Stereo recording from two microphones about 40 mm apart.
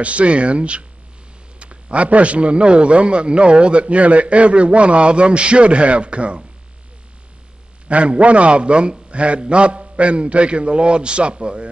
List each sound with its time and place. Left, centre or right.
0.0 s a man's voice: right
7.9 s a man's voice: right